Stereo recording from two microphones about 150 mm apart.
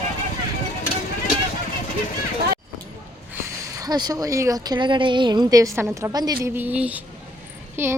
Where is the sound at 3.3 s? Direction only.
20° right (ahead or behind).